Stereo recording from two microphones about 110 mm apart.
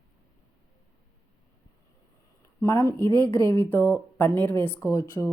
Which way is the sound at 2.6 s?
25° left (ahead or behind).